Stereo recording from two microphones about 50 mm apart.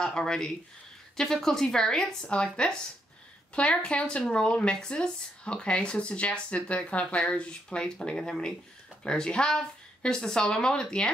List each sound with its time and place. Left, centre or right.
0.0 s a woman's voice: centre